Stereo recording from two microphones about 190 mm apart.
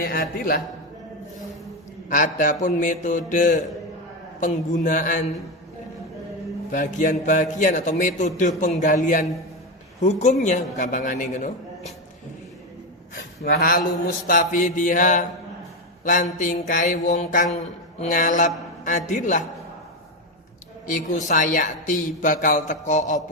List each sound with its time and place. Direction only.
0.0 s mantra: 50° left (ahead or behind)
2.0 s mantra: 45° left (ahead or behind)
6.7 s a woman's voice: 45° left (ahead or behind)
10.4 s mantra: 40° left (ahead or behind)
13.1 s mantra: 55° left (ahead or behind)
16.0 s a woman's voice: 40° left (ahead or behind)
18.0 s mantra: 45° left (ahead or behind)
20.8 s a woman's voice: 40° left (ahead or behind)